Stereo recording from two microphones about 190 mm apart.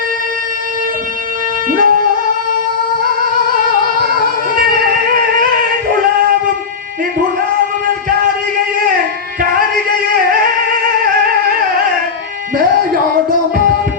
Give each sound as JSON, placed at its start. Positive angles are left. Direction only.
{"t": 1.7, "sound": "music", "side_deg": -45}